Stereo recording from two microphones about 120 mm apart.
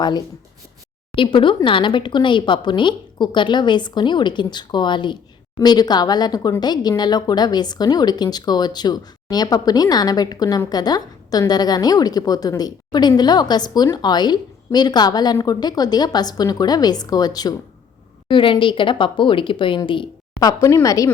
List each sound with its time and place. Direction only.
1.1 s speech: 45° left (ahead or behind)
20.5 s speech: 25° left (ahead or behind)